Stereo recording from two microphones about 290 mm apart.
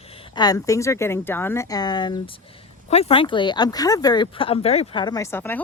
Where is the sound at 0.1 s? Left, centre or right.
Centre.